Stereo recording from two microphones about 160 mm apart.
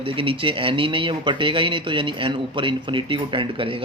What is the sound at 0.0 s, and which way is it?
Speech, 35° right (ahead or behind).